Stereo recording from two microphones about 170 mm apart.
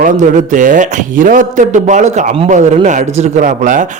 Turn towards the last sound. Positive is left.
turn(degrees=-50)  # may be behind; listen again after turning